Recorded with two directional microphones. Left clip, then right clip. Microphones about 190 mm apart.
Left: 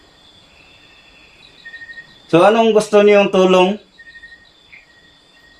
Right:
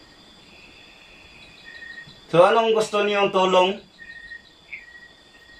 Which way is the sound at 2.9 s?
60° left (ahead or behind).